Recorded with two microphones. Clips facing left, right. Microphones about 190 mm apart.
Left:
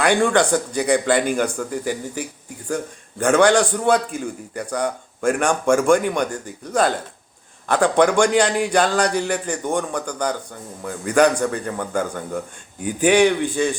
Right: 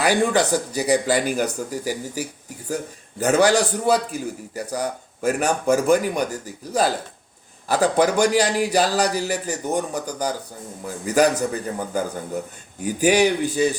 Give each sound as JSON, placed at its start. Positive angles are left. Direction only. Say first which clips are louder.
{"t": 0.0, "sound": "a man's voice", "louder": "left 2 dB", "side_deg": -5}